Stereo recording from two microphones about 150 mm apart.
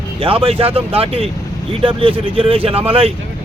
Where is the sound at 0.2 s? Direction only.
40° right (ahead or behind).